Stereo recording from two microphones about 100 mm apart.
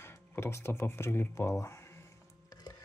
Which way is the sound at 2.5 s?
40° left (ahead or behind).